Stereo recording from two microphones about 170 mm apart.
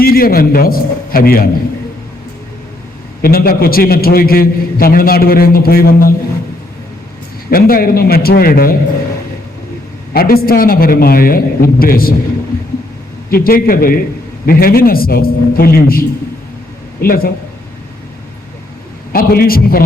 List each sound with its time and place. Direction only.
0.0 s a man's voice: 60° left (ahead or behind)
3.2 s a man's voice: 60° left (ahead or behind)
7.5 s a man's voice: 60° left (ahead or behind)
10.1 s a man's voice: 60° left (ahead or behind)
13.3 s a man's voice: 60° left (ahead or behind)
19.1 s a man's voice: 60° left (ahead or behind)